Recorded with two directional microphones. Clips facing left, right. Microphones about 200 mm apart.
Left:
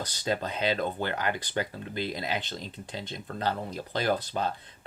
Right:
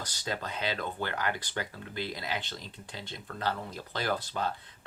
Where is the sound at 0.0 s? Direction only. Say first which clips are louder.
Left 6 dB; 20° left (ahead or behind).